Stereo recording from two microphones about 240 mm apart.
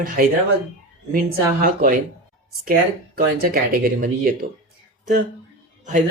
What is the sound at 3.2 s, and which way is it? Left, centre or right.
Speech, right.